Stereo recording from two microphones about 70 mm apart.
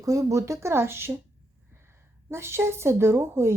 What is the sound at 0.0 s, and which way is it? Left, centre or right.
Speech, right.